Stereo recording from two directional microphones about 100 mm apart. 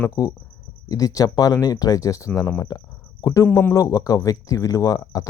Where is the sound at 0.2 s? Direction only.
35° left (ahead or behind).